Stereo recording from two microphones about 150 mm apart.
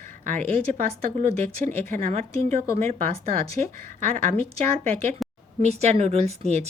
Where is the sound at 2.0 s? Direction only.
45° right (ahead or behind).